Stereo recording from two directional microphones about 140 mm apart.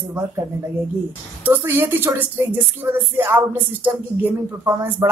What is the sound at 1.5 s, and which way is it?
Speech, 15° right (ahead or behind).